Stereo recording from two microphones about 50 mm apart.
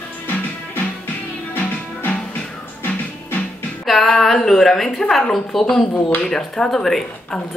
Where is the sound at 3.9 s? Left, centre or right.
Centre.